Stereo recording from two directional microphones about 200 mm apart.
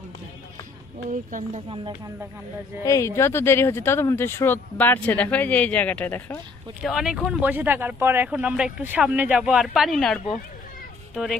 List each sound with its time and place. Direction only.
1.1 s speech: 40° right (ahead or behind)
2.8 s speech: 15° left (ahead or behind)